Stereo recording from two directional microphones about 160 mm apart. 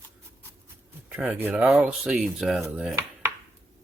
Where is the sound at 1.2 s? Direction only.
5° right (ahead or behind).